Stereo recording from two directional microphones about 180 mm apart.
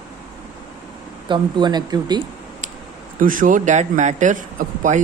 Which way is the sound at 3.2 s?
50° right (ahead or behind).